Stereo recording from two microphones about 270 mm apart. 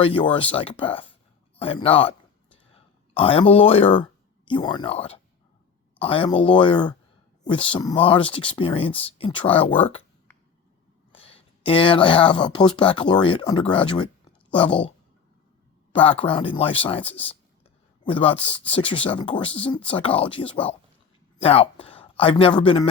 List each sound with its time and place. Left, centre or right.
0.0 s speech: centre
11.2 s speech: left